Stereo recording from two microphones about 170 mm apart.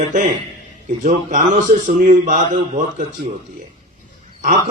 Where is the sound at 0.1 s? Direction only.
50° right (ahead or behind).